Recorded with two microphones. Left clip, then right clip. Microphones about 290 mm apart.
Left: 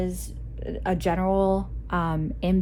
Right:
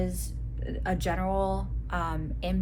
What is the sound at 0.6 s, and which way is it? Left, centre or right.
Speech, left.